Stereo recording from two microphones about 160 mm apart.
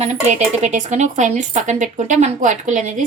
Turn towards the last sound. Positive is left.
turn(degrees=-50)  # may be behind; listen again after turning